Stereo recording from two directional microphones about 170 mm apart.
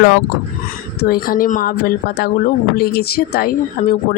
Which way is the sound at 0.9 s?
65° left (ahead or behind).